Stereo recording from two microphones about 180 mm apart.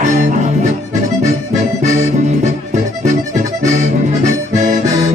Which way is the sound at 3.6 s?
40° right (ahead or behind).